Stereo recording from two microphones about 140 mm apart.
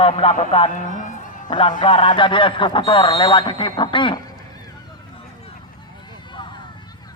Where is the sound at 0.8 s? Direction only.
65° left (ahead or behind).